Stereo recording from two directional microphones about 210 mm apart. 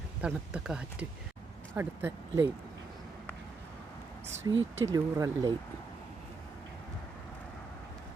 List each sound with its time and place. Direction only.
0.2 s speech: 5° right (ahead or behind)
4.5 s speech: 60° right (ahead or behind)
4.9 s speech: 15° right (ahead or behind)